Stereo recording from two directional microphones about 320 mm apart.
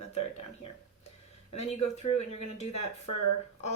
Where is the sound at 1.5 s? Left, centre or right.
Centre.